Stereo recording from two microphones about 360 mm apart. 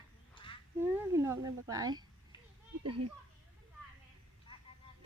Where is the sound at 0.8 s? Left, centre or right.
Centre.